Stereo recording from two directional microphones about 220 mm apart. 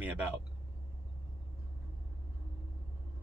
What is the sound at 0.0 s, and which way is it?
Vehicle, 5° right (ahead or behind).